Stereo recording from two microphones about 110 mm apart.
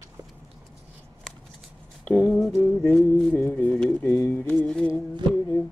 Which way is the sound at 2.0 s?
25° left (ahead or behind).